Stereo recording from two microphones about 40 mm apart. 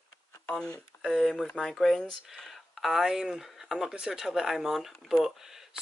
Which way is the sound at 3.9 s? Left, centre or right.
Centre.